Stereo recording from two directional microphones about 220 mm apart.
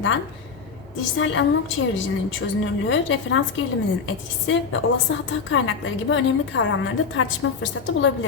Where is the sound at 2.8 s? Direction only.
60° left (ahead or behind).